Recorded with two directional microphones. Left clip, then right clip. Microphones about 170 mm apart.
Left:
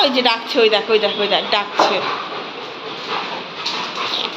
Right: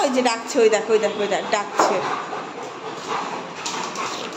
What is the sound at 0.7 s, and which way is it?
Speech, 10° right (ahead or behind).